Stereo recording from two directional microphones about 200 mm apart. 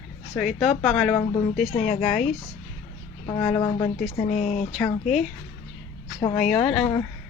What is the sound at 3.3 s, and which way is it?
Speech, 15° left (ahead or behind).